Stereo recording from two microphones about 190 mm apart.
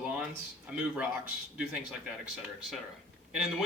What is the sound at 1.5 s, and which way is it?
Speech, 5° right (ahead or behind).